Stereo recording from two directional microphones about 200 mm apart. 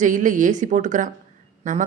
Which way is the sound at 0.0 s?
40° right (ahead or behind).